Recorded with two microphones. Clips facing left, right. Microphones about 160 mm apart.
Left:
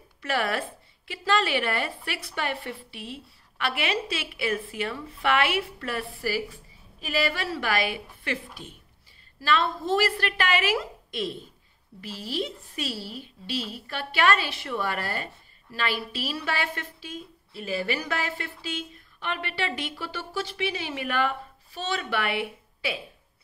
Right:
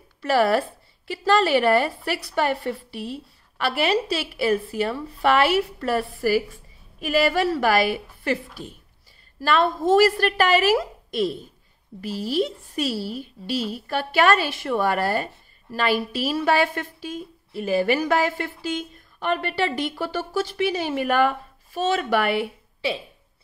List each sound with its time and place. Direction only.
0.2 s a woman's voice: 35° right (ahead or behind)
9.4 s a woman's voice: 45° right (ahead or behind)